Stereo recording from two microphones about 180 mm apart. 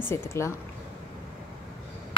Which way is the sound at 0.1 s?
15° left (ahead or behind).